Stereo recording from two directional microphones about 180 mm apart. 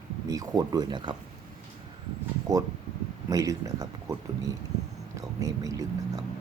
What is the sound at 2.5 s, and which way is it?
Speech, 20° right (ahead or behind).